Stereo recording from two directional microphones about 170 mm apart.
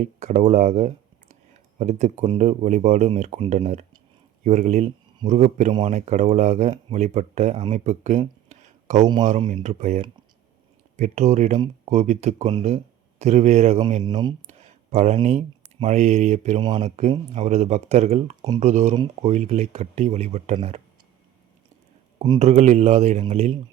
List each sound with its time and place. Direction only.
0.0 s speech: 40° right (ahead or behind)
16.6 s speech: 25° right (ahead or behind)
16.8 s speech: 40° right (ahead or behind)
22.4 s speech: 45° right (ahead or behind)